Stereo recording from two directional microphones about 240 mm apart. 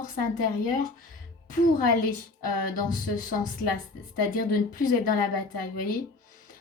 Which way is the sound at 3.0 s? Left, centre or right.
Left.